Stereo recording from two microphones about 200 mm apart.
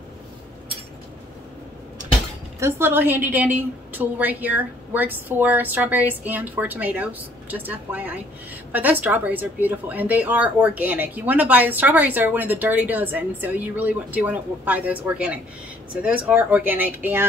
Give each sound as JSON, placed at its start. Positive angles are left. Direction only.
{"t": 2.6, "sound": "a woman's voice", "side_deg": -10}